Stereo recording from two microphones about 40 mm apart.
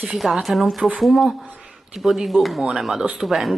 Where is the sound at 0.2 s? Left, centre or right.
Centre.